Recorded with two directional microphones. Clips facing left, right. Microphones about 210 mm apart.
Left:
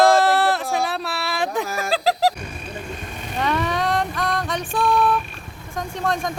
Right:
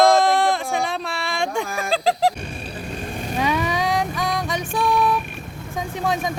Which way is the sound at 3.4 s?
Centre (ahead or behind).